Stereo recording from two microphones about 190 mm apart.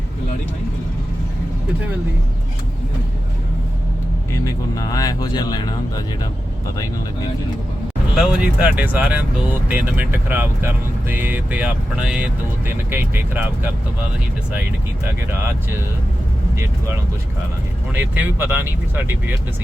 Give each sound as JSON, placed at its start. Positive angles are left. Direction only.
{"t": 4.7, "sound": "speech", "side_deg": 20}
{"t": 8.1, "sound": "speech", "side_deg": -5}
{"t": 16.6, "sound": "speech", "side_deg": -15}